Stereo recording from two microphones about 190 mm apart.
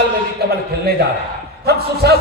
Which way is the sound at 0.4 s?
55° right (ahead or behind).